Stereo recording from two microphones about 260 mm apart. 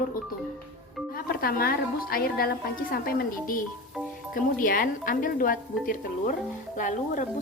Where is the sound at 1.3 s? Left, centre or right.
Left.